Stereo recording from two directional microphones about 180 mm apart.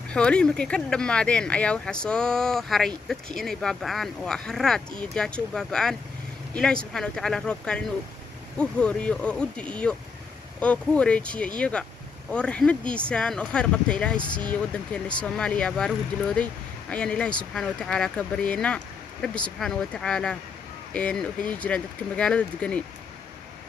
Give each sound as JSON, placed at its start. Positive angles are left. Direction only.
{"t": 0.1, "sound": "speech", "side_deg": 5}